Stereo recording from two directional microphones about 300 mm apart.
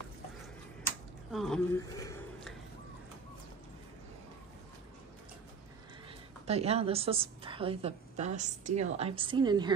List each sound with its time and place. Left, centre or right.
1.3 s speech: centre
2.0 s a sound: centre
6.4 s a woman's voice: right